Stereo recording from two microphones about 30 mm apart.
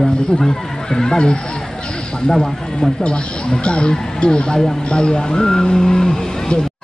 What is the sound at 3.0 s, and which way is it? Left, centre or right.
Speech, left.